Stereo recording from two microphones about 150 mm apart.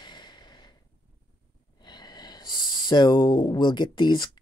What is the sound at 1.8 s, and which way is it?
Speech, 30° left (ahead or behind).